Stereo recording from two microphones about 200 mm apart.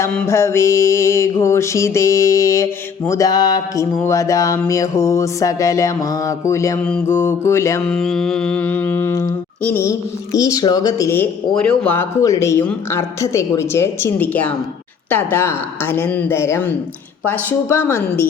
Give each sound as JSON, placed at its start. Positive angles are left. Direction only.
{"t": 0.0, "sound": "speech", "side_deg": 10}
{"t": 7.9, "sound": "speech", "side_deg": 5}